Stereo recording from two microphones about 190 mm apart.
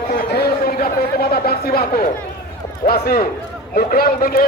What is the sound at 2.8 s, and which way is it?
A man's voice, 55° left (ahead or behind).